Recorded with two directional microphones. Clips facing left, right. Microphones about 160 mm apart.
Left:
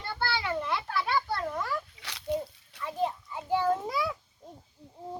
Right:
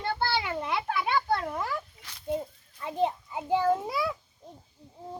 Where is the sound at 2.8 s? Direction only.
25° right (ahead or behind).